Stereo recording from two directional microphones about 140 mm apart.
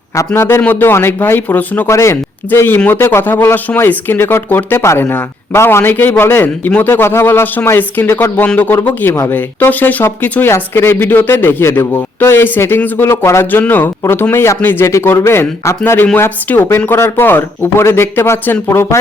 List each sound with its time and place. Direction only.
0.3 s speech: 15° left (ahead or behind)